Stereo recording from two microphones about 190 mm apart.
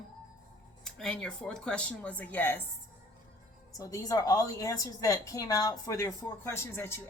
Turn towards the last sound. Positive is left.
turn(degrees=15)  # may be behind; listen again after turning